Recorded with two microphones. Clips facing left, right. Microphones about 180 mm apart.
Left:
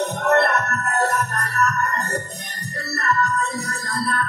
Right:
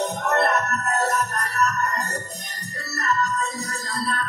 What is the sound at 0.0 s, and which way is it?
Music, 60° left (ahead or behind).